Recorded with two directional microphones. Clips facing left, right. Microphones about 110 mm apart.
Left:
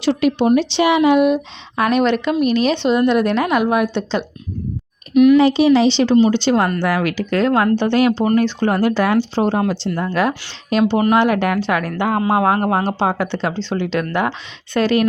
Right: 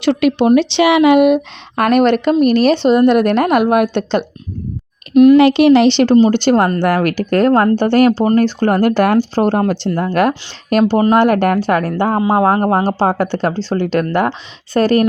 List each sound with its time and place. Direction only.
0.0 s a woman's voice: 70° right (ahead or behind); by 4.3 s 55° right (ahead or behind)
5.1 s speech: 40° right (ahead or behind)
5.4 s a woman's voice: 70° right (ahead or behind); by 15.0 s 45° right (ahead or behind)